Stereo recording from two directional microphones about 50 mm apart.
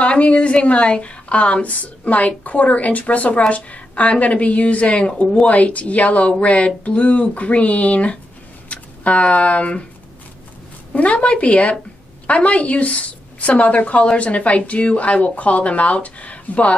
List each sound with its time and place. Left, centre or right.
0.0 s a woman's voice: left
11.0 s a woman's voice: left